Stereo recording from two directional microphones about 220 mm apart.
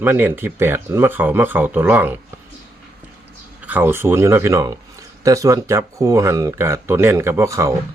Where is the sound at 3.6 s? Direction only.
10° right (ahead or behind).